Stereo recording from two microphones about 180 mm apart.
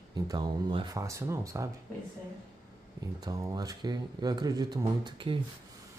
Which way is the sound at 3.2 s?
20° right (ahead or behind).